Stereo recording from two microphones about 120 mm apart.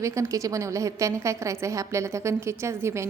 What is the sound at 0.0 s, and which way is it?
A woman's voice, 25° right (ahead or behind).